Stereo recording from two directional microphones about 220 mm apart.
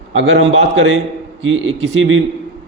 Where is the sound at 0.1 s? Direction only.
60° right (ahead or behind).